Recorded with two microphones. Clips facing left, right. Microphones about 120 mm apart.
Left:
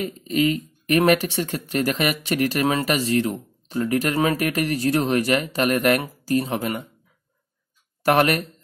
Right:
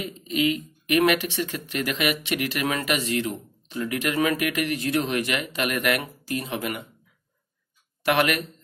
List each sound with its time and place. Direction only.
0.0 s speech: 40° left (ahead or behind)
8.0 s speech: 40° left (ahead or behind)